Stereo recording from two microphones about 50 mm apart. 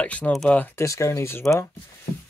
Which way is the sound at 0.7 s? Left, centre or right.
Left.